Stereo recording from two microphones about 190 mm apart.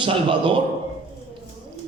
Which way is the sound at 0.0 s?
25° right (ahead or behind).